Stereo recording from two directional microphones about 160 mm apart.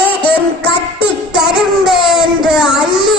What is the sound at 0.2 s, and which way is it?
Music, 30° left (ahead or behind).